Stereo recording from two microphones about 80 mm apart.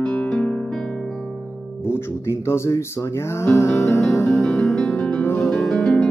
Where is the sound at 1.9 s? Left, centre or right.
Left.